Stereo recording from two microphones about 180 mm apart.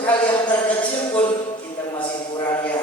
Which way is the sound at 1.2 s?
25° left (ahead or behind).